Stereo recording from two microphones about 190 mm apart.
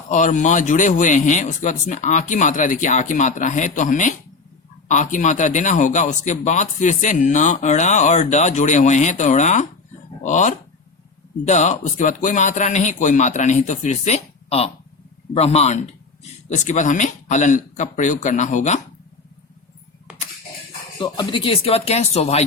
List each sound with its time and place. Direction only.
0.1 s speech: 40° left (ahead or behind)
21.0 s speech: 25° left (ahead or behind)